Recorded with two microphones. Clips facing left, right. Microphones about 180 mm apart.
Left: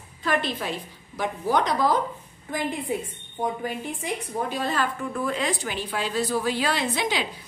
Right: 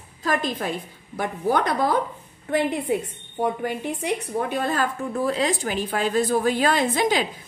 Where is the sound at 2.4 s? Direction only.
65° right (ahead or behind).